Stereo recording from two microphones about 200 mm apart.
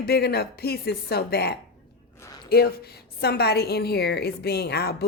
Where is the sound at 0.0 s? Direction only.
50° left (ahead or behind).